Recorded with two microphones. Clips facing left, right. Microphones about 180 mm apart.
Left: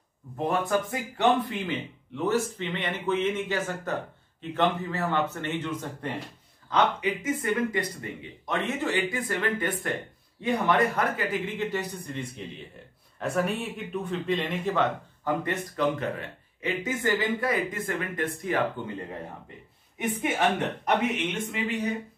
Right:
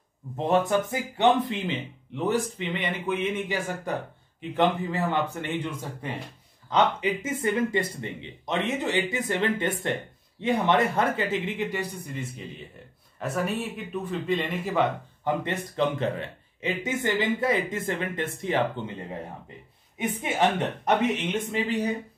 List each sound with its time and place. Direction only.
0.5 s speech: 25° right (ahead or behind)
6.7 s speech: 25° right (ahead or behind)
12.1 s speech: 5° right (ahead or behind)
15.2 s speech: 25° right (ahead or behind)
20.0 s speech: 20° right (ahead or behind)